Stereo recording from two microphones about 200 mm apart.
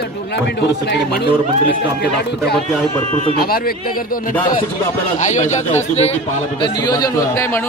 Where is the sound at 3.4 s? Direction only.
50° left (ahead or behind).